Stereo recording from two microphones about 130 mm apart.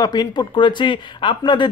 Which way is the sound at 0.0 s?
30° left (ahead or behind).